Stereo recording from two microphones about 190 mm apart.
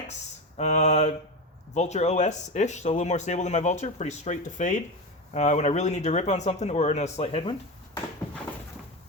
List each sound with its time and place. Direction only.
0.5 s speech: 35° left (ahead or behind)